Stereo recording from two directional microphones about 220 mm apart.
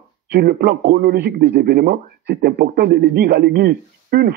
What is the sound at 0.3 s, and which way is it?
Speech, 45° right (ahead or behind).